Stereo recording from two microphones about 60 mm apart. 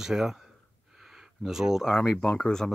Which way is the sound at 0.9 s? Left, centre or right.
Centre.